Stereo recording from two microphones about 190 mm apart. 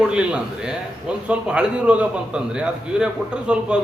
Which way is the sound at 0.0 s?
5° right (ahead or behind).